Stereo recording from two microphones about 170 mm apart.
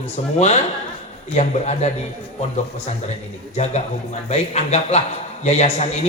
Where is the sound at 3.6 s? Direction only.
40° left (ahead or behind).